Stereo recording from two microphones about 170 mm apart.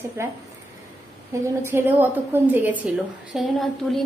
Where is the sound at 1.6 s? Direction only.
10° right (ahead or behind).